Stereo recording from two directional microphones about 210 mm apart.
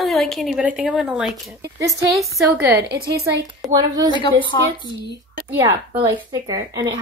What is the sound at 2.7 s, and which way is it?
A woman's voice, 20° right (ahead or behind).